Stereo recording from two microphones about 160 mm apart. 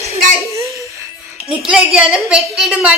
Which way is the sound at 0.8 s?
20° right (ahead or behind).